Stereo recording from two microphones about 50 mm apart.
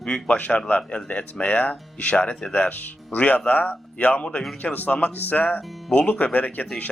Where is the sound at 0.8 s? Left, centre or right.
Left.